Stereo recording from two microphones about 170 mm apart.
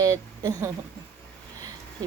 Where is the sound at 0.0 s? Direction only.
20° right (ahead or behind).